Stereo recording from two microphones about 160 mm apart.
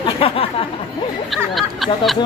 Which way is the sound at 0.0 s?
35° left (ahead or behind).